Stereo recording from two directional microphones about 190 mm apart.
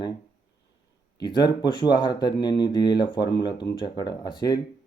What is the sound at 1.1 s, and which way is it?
Speech, 20° left (ahead or behind).